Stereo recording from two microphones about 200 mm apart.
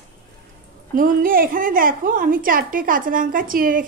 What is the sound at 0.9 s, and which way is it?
A woman's voice, 45° right (ahead or behind).